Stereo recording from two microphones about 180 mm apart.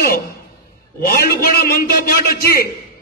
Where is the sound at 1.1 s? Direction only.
55° left (ahead or behind).